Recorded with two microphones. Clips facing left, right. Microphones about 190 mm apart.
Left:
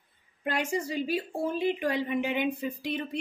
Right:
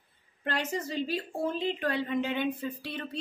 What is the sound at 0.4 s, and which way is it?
Speech, 10° left (ahead or behind).